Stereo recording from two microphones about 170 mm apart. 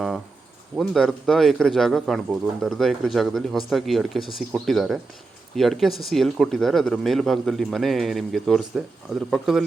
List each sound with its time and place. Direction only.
0.8 s speech: centre (ahead or behind)